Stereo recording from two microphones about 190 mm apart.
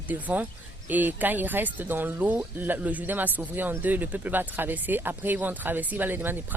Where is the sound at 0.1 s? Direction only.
10° right (ahead or behind).